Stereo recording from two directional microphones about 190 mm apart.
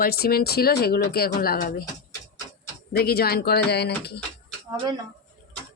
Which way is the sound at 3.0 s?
55° left (ahead or behind).